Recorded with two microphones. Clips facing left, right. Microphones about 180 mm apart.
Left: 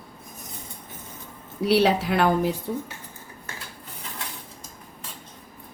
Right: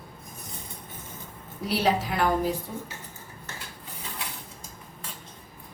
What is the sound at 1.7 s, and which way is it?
Speech, 70° left (ahead or behind).